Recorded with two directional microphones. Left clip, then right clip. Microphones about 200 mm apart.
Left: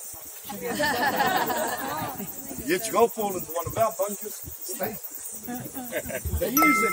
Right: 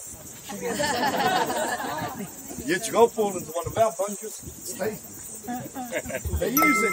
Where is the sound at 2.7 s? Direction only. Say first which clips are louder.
Right 2 dB; 40° right (ahead or behind).